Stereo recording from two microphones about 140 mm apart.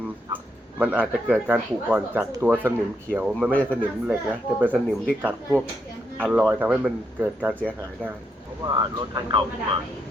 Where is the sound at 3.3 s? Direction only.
10° left (ahead or behind).